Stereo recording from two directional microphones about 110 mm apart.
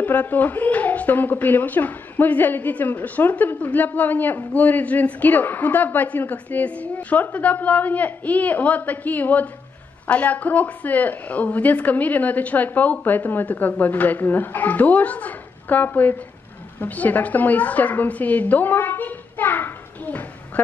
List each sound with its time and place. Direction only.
0.0 s a woman's voice: 15° left (ahead or behind)